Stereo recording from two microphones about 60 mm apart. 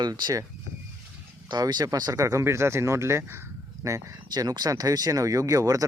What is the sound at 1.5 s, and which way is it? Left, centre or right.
Speech, right.